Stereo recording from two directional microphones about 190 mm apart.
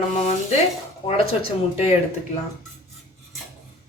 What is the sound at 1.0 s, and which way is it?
Speech, 35° left (ahead or behind).